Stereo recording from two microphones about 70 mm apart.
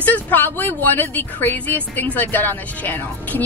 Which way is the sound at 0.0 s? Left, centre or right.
Left.